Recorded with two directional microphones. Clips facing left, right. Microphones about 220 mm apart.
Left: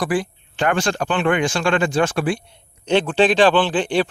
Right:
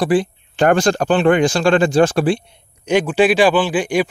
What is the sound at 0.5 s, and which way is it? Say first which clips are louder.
Speech: right 6 dB; 40° right (ahead or behind).